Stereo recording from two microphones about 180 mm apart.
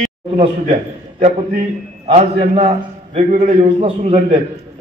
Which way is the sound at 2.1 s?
35° right (ahead or behind).